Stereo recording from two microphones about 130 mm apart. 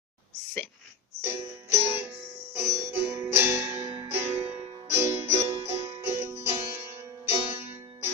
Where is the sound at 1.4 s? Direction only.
20° right (ahead or behind).